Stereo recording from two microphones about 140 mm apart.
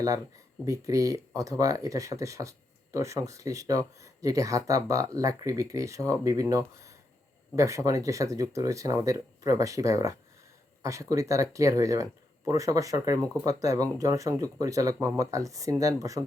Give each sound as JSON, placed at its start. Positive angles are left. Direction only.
{"t": 0.6, "sound": "speech", "side_deg": -25}